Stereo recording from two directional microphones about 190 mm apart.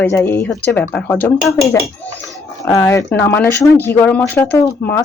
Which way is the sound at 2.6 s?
15° left (ahead or behind).